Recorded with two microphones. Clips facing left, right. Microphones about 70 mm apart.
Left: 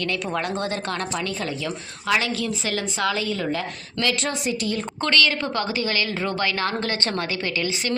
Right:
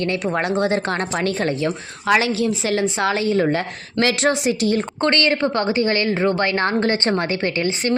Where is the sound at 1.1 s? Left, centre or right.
Right.